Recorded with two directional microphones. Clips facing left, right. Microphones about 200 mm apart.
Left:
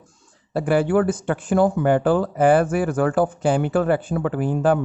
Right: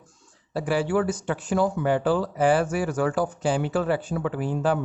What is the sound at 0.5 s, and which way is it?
Speech, 55° left (ahead or behind).